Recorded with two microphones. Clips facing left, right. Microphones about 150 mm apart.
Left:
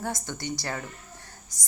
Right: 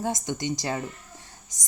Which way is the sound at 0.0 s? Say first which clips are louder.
Right 4 dB; 20° right (ahead or behind).